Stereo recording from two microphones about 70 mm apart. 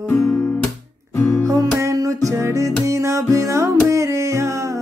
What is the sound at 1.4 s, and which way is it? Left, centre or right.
Music, right.